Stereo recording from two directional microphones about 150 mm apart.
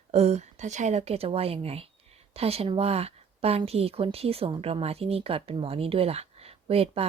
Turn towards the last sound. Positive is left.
turn(degrees=-40)  # may be behind; listen again after turning